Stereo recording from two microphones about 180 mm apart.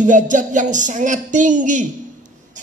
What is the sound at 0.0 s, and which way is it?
A man's voice, 45° right (ahead or behind).